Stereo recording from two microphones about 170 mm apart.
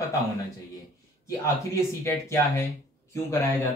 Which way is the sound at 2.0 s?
15° left (ahead or behind).